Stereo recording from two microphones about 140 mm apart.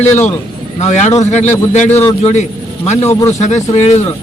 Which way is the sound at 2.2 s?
55° left (ahead or behind).